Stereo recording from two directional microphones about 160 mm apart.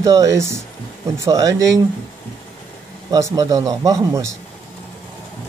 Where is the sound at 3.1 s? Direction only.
20° right (ahead or behind).